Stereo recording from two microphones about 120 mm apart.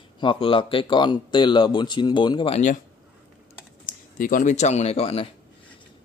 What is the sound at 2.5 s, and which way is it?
Speech, 75° left (ahead or behind).